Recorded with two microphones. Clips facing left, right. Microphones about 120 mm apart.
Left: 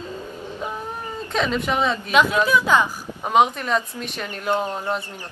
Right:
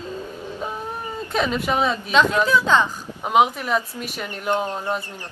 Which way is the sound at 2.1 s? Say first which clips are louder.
Even; 10° left (ahead or behind).